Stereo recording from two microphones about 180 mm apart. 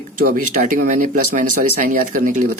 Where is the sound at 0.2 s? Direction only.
50° right (ahead or behind).